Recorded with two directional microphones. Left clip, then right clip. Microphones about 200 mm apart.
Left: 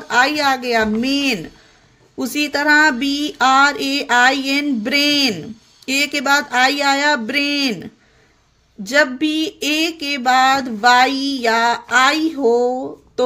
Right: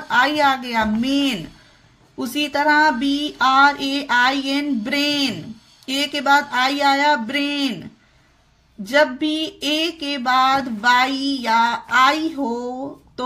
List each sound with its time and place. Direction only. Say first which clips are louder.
0.1 s speech: left 1 dB; 25° left (ahead or behind)